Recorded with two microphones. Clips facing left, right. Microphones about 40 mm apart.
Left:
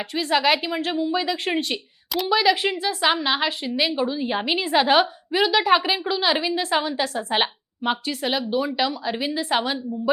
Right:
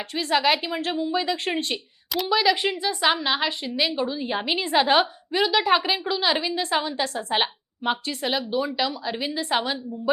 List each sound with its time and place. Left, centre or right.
0.1 s a woman's voice: centre